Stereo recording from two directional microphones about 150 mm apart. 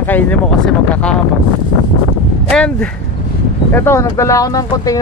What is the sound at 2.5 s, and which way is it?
Speech, 10° left (ahead or behind).